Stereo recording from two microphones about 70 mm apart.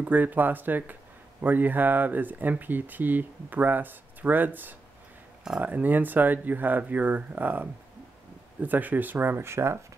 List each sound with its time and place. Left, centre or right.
0.0 s speech: right